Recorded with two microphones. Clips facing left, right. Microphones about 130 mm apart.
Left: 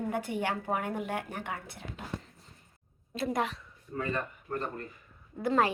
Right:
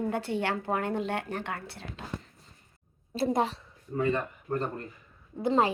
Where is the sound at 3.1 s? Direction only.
30° right (ahead or behind).